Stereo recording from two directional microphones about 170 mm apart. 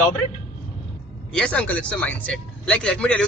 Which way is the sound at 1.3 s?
5° left (ahead or behind).